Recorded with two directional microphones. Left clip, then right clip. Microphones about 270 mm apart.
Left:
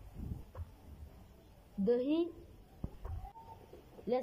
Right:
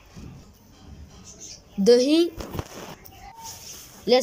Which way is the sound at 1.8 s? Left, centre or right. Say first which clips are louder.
Right 15 dB; centre.